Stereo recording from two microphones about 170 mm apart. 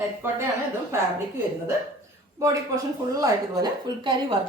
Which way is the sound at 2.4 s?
20° right (ahead or behind).